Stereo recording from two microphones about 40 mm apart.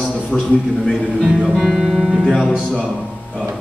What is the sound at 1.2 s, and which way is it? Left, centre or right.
Music, right.